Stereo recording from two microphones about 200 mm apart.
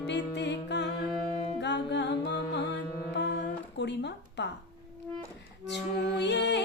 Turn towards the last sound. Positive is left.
turn(degrees=60)  # may be behind; listen again after turning